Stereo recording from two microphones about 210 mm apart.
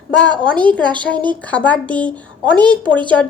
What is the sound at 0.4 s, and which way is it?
A woman's voice, 5° left (ahead or behind).